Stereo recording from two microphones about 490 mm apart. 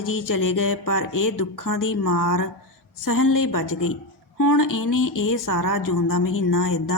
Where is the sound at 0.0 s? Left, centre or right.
Left.